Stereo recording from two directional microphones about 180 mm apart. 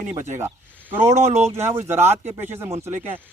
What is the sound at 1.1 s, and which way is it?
Speech, 40° right (ahead or behind).